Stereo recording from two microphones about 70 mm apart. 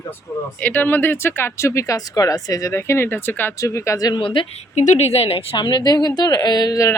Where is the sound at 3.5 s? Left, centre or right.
Left.